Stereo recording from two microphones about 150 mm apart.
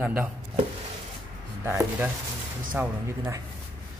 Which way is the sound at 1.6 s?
15° right (ahead or behind).